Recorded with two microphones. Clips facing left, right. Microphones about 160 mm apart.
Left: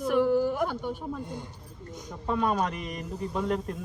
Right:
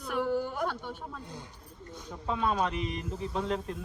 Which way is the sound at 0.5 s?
10° left (ahead or behind).